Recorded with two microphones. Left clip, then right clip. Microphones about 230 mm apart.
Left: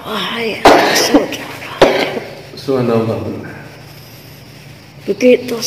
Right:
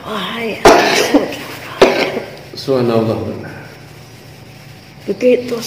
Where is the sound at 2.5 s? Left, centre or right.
Right.